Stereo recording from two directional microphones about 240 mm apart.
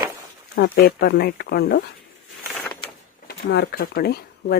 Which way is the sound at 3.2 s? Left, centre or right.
Left.